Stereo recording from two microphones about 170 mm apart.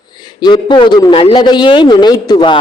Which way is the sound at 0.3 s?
25° left (ahead or behind).